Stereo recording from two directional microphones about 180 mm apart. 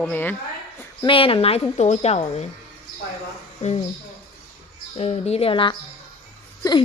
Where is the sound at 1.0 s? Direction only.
30° left (ahead or behind).